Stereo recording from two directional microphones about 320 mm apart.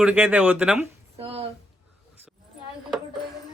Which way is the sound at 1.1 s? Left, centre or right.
Centre.